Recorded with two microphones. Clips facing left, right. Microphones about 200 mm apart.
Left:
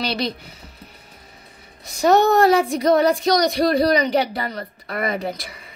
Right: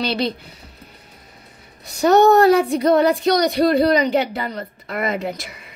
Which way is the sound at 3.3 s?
25° right (ahead or behind).